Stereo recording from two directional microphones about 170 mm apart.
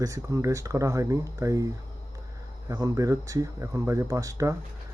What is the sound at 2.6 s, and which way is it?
Speech, 20° right (ahead or behind).